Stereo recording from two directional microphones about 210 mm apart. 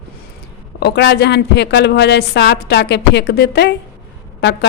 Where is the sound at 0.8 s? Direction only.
55° left (ahead or behind).